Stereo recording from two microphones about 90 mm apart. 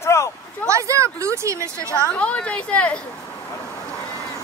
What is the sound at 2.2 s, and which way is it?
Speech, 15° left (ahead or behind).